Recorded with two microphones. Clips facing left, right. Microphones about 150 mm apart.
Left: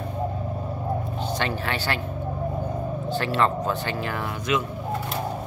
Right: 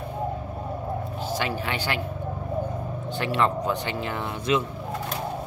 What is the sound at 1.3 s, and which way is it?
Speech, 10° right (ahead or behind).